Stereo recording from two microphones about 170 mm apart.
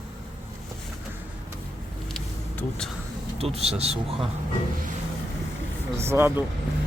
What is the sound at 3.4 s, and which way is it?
Speech, 35° right (ahead or behind).